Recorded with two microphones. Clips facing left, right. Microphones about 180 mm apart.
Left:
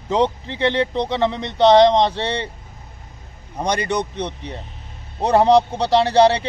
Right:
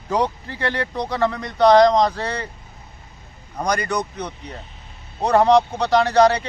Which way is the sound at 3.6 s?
25° left (ahead or behind).